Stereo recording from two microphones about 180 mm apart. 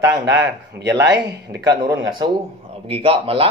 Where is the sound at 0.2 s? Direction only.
65° right (ahead or behind).